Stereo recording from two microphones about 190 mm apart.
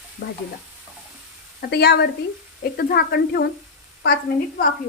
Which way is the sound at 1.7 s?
60° left (ahead or behind).